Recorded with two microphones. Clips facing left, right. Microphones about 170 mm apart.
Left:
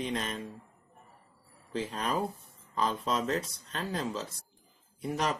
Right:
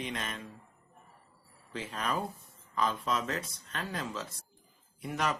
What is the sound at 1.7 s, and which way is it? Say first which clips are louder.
Speech: left 3 dB; 35° left (ahead or behind).